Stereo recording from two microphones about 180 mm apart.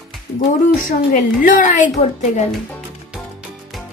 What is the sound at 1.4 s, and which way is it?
Speech, 45° left (ahead or behind).